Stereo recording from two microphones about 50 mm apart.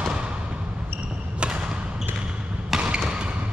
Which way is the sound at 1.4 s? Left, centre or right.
Centre.